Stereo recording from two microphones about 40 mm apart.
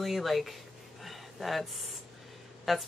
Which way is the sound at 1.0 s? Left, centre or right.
Centre.